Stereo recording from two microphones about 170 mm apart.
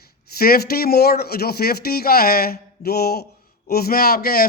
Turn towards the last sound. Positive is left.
turn(degrees=60)  # may be behind; listen again after turning